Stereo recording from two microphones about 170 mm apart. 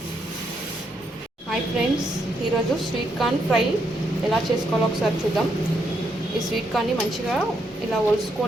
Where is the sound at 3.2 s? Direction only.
Centre (ahead or behind).